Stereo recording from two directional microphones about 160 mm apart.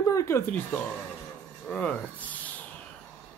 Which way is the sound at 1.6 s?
5° left (ahead or behind).